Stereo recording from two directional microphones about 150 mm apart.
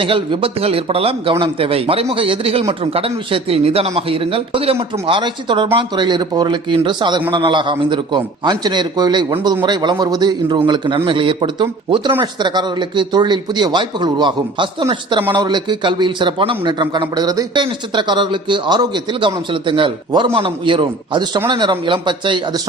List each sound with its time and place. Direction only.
0.0 s a man's voice: 35° right (ahead or behind)